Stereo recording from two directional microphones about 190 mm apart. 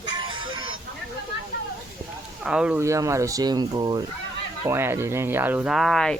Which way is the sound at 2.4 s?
5° right (ahead or behind).